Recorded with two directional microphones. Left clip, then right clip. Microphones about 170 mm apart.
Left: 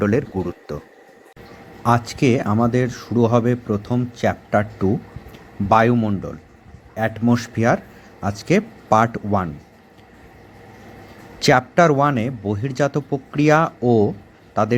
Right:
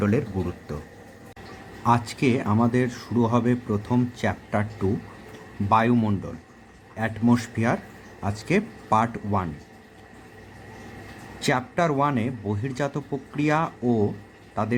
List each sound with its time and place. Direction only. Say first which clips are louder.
0.0 s speech: left 5 dB; 35° left (ahead or behind)
1.8 s speech: left 4 dB; 25° left (ahead or behind)
6.0 s speech: left 4 dB; 15° left (ahead or behind)
11.3 s a man's voice: left 9 dB; 35° left (ahead or behind)